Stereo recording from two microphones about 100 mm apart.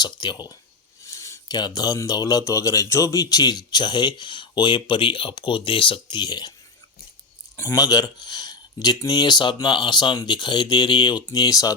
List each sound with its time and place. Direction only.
0.0 s speech: 45° left (ahead or behind)
1.0 s a sound: 30° left (ahead or behind)
1.5 s speech: 45° left (ahead or behind)
7.5 s a man's voice: 25° left (ahead or behind)
7.8 s speech: 40° left (ahead or behind)